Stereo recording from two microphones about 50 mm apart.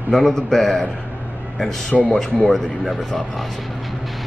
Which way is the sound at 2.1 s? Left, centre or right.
Centre.